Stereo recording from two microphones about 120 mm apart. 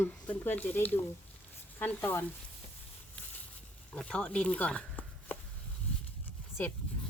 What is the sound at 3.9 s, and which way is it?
Speech, 10° left (ahead or behind).